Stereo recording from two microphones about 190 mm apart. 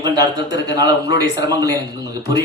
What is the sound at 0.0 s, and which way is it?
Speech, 20° right (ahead or behind).